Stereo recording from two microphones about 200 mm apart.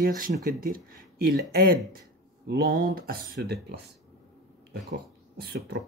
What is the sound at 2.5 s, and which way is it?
Speech, 45° right (ahead or behind).